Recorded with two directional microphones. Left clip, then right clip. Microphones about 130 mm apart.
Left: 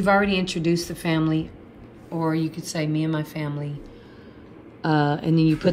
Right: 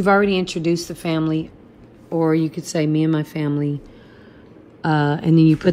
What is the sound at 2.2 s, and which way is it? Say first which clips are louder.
Speech: right 5 dB; 40° right (ahead or behind).